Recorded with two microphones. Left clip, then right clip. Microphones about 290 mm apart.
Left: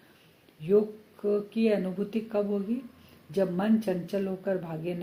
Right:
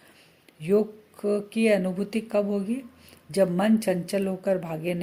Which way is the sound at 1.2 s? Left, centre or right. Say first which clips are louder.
Right 3 dB; right.